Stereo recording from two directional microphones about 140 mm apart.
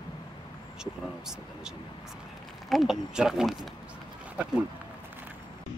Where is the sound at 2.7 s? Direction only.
Centre (ahead or behind).